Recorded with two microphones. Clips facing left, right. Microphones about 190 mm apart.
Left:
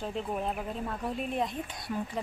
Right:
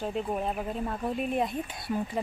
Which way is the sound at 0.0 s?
10° right (ahead or behind).